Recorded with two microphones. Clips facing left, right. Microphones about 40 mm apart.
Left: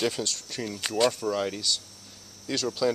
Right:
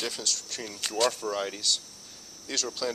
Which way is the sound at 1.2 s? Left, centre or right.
Centre.